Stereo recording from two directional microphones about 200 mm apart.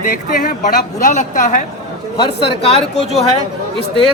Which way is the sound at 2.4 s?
30° left (ahead or behind).